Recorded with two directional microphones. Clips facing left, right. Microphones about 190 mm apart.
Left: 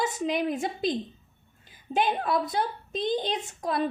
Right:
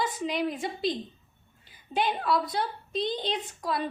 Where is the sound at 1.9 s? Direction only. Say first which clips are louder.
Left 1 dB; 50° left (ahead or behind).